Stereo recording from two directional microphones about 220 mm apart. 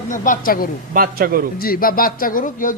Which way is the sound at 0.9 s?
40° right (ahead or behind).